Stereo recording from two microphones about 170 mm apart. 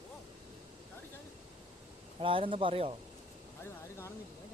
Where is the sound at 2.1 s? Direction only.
30° right (ahead or behind).